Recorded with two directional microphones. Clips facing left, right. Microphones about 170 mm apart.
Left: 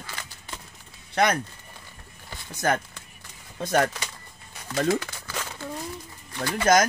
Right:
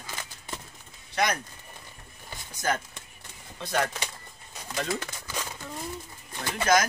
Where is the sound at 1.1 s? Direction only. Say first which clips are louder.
Left 5 dB; 55° left (ahead or behind).